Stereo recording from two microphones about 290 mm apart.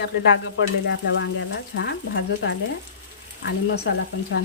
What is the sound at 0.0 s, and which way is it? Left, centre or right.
Speech, left.